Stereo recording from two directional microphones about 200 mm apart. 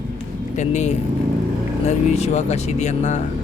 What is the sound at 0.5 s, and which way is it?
Speech, 35° left (ahead or behind).